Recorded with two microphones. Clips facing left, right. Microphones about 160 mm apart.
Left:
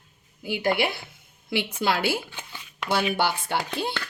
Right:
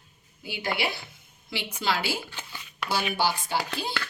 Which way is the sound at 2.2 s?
20° left (ahead or behind).